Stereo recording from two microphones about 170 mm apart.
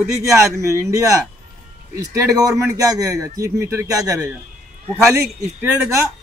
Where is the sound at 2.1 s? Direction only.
20° right (ahead or behind).